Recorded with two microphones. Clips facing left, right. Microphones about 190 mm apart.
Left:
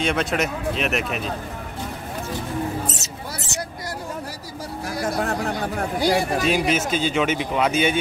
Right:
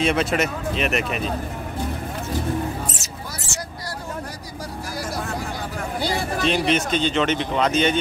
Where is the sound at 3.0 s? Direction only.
20° left (ahead or behind).